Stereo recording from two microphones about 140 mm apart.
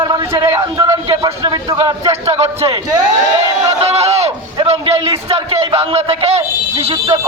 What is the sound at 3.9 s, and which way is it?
A man's voice, 50° right (ahead or behind).